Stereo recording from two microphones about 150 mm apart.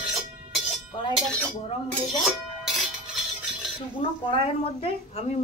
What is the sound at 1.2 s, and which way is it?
Speech, 10° left (ahead or behind).